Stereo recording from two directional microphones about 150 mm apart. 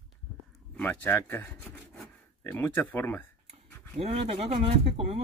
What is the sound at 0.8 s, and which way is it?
Speech, 10° left (ahead or behind).